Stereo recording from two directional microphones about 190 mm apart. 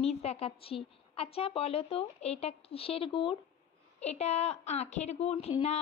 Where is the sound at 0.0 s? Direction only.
30° left (ahead or behind).